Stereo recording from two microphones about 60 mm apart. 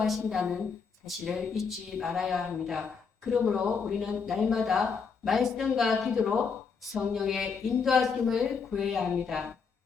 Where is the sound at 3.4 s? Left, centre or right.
Centre.